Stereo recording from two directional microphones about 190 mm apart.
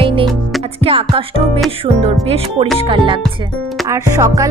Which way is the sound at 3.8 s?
15° right (ahead or behind).